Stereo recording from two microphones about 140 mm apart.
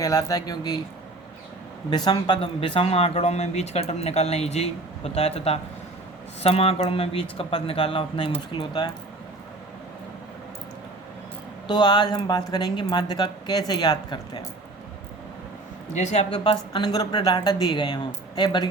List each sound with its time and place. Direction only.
0.0 s speech: 25° left (ahead or behind)
1.9 s speech: 30° left (ahead or behind)
11.7 s speech: 30° left (ahead or behind)
16.0 s speech: 55° left (ahead or behind)
16.3 s speech: 40° left (ahead or behind)